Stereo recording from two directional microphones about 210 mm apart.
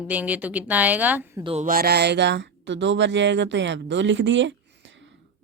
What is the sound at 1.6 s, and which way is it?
Speech, 45° right (ahead or behind).